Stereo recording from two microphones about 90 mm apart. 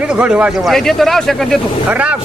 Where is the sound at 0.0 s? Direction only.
15° right (ahead or behind).